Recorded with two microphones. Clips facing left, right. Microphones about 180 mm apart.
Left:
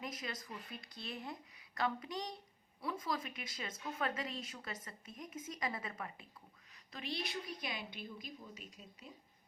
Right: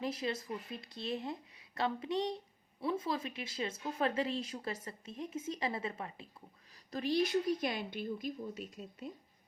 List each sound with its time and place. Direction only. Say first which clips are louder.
0.0 s a woman's voice: right 8 dB; 30° right (ahead or behind)
6.9 s a woman's voice: right 11 dB; 40° right (ahead or behind)